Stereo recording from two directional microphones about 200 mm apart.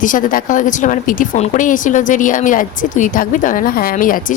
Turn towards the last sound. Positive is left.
turn(degrees=45)  # may be behind; listen again after turning